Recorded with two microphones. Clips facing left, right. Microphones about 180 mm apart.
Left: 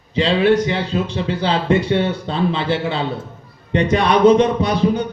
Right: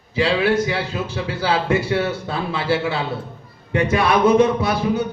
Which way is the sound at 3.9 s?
5° right (ahead or behind).